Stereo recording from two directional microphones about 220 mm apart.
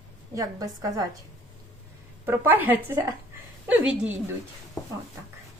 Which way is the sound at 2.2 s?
10° right (ahead or behind).